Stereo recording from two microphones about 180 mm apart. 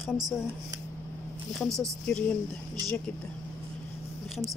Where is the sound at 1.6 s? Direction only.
15° right (ahead or behind).